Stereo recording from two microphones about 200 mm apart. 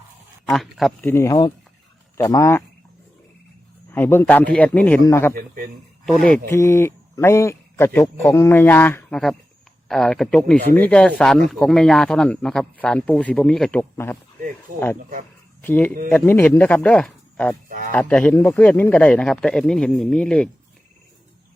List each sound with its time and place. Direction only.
0.4 s speech: centre (ahead or behind)
1.1 s a man's voice: 15° left (ahead or behind)
3.9 s a man's voice: 10° left (ahead or behind)
5.3 s a man's voice: 45° right (ahead or behind)
6.2 s a man's voice: 15° left (ahead or behind)
15.6 s a man's voice: 10° left (ahead or behind)
17.7 s speech: 40° right (ahead or behind)
17.9 s speech: 5° left (ahead or behind)